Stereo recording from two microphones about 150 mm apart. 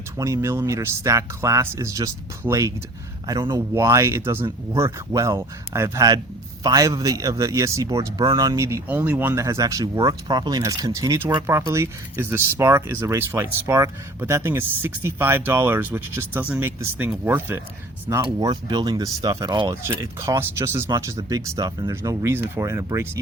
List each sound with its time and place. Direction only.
0.2 s a man's voice: 20° right (ahead or behind)
18.2 s a man's voice: 30° right (ahead or behind)